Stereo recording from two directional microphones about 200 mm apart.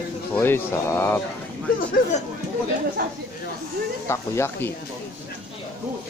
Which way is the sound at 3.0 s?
50° right (ahead or behind).